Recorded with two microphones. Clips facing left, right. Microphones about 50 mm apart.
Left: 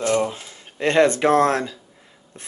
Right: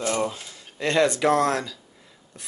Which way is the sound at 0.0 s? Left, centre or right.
Centre.